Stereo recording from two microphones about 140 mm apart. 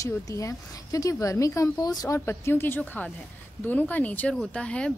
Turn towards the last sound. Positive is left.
turn(degrees=5)  # may be behind; listen again after turning